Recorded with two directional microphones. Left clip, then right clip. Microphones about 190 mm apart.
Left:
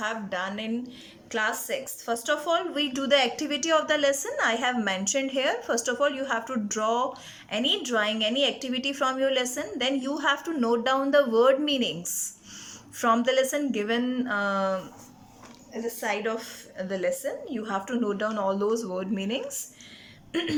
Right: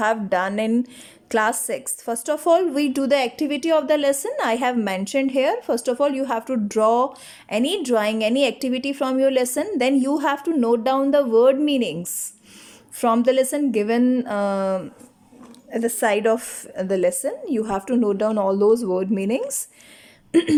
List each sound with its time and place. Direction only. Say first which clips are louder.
0.0 s speech: right 10 dB; 40° right (ahead or behind)
13.0 s speech: right 5 dB; 25° right (ahead or behind)
15.7 s speech: right 9 dB; 45° right (ahead or behind)